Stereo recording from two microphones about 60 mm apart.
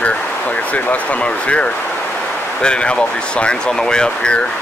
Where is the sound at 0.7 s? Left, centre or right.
Centre.